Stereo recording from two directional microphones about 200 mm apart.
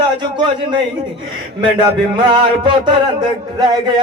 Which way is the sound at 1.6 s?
25° right (ahead or behind).